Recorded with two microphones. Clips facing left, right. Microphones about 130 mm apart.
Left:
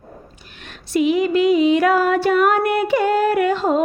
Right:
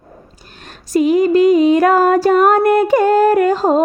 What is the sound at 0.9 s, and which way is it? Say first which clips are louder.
Music: right 5 dB; 40° right (ahead or behind).